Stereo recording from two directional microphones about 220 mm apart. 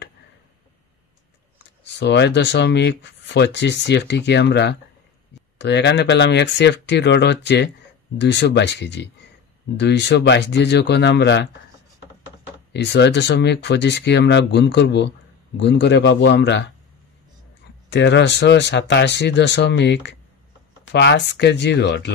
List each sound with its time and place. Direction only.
1.6 s speech: 50° left (ahead or behind)
12.7 s speech: 50° left (ahead or behind)
17.8 s speech: 55° left (ahead or behind)